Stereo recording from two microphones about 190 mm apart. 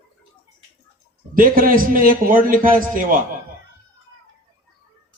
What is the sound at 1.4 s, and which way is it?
A man's voice, 45° right (ahead or behind).